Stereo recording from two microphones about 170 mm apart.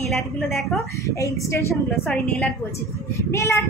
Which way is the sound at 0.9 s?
20° left (ahead or behind).